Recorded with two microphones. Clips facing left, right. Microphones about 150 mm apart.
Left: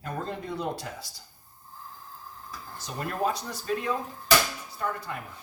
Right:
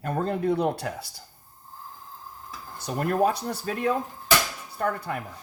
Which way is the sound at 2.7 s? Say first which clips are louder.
Right 8 dB; 60° right (ahead or behind).